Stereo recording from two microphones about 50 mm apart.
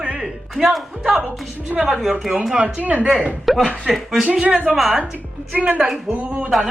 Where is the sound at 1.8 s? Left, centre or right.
Centre.